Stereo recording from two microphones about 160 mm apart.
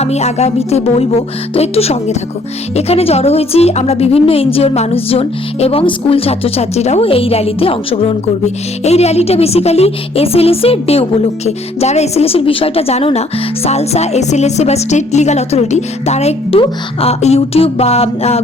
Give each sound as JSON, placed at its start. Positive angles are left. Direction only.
{"t": 0.0, "sound": "a woman's voice", "side_deg": 40}